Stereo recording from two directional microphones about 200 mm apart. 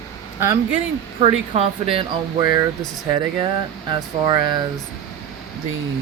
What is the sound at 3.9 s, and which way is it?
Speech, 20° right (ahead or behind).